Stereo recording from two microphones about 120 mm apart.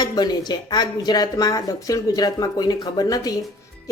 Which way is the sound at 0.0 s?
35° left (ahead or behind).